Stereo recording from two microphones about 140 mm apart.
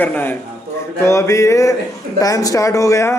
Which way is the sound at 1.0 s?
20° left (ahead or behind).